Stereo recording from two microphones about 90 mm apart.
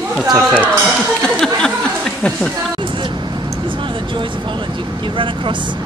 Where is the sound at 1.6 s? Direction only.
10° left (ahead or behind).